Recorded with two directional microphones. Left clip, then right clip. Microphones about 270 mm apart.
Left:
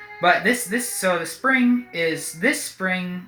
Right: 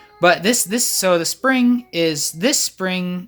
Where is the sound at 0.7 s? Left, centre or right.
Right.